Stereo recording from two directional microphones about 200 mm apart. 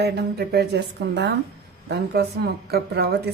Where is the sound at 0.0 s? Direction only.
55° right (ahead or behind).